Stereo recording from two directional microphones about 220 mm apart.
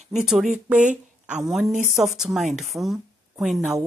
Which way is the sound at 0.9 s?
35° right (ahead or behind).